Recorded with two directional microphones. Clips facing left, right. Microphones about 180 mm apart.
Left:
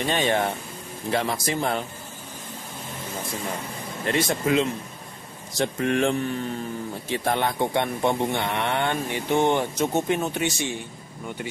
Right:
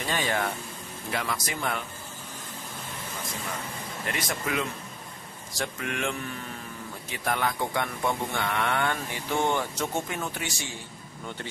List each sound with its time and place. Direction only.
0.0 s speech: 25° left (ahead or behind)
4.0 s speech: 30° left (ahead or behind)
5.9 s speech: 35° left (ahead or behind)